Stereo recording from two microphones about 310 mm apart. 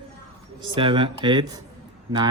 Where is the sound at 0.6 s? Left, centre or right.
Centre.